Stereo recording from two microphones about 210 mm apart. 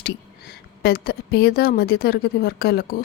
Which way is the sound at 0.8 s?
45° left (ahead or behind).